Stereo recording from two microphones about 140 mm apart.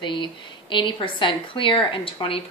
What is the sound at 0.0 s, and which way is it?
Speech, 35° left (ahead or behind).